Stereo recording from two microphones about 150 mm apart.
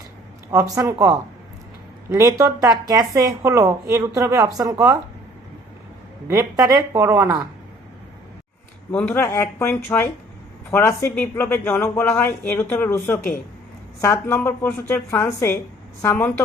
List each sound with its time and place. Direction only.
0.5 s a woman's voice: 20° right (ahead or behind)
6.2 s a woman's voice: 20° right (ahead or behind)
8.9 s speech: 15° left (ahead or behind)